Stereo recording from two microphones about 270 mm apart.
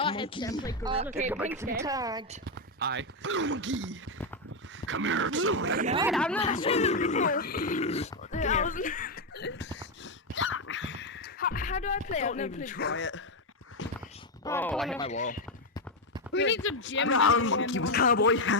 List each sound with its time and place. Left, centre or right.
0.0 s speech: centre
1.3 s a woman's voice: centre
2.3 s speech: right
5.8 s speech: right
6.1 s speech: centre
6.4 s speech: left
10.3 s a sound: left
14.4 s speech: centre
14.9 s speech: left
16.3 s speech: left